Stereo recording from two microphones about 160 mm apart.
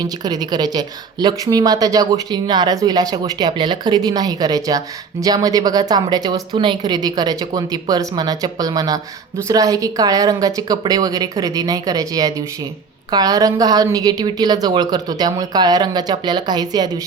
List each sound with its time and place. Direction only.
0.0 s speech: 25° right (ahead or behind)